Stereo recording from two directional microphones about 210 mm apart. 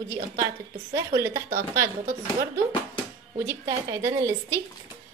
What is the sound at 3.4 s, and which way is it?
A woman's voice, 20° right (ahead or behind).